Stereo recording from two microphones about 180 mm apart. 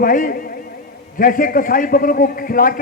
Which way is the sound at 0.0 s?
50° left (ahead or behind).